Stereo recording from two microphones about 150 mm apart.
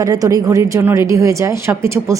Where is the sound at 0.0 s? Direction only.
25° right (ahead or behind).